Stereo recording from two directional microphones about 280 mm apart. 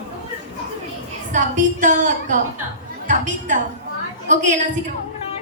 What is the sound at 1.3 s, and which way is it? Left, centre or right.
A woman's voice, right.